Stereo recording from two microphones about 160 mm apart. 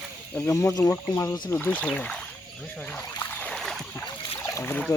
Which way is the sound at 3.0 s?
15° left (ahead or behind).